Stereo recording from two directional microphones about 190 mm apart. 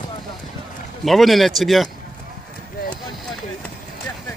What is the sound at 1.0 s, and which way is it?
Speech, centre (ahead or behind).